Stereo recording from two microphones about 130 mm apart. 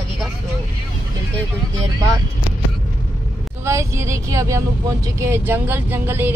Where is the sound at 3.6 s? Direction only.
20° right (ahead or behind).